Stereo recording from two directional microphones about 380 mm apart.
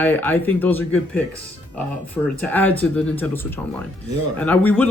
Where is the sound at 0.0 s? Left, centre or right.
Centre.